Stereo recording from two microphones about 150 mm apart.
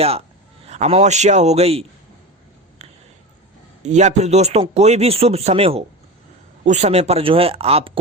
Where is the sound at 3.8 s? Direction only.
50° right (ahead or behind).